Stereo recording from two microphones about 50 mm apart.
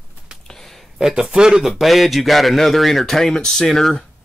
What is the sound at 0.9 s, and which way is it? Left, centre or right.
Speech, centre.